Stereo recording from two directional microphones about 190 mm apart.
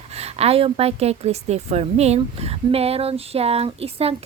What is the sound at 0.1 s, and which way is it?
A woman's voice, 35° right (ahead or behind).